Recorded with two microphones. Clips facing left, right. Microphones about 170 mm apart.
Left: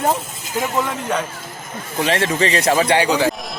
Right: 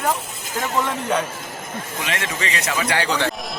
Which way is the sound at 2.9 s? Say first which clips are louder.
Left 5 dB; 10° left (ahead or behind).